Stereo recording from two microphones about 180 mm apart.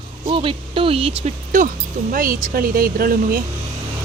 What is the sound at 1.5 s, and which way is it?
Speech, 45° right (ahead or behind).